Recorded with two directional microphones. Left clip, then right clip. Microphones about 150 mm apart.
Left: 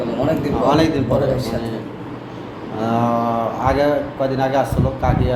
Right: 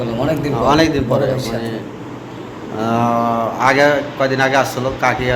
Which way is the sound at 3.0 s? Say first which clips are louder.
Right 4 dB; 35° right (ahead or behind).